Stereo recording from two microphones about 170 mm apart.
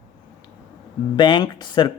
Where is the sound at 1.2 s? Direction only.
25° left (ahead or behind).